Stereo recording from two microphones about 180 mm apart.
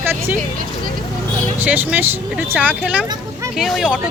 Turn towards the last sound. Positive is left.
turn(degrees=0)  # may be behind; listen again after turning